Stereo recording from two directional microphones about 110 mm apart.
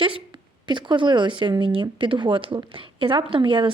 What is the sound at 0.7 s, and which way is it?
A woman's voice, 45° right (ahead or behind).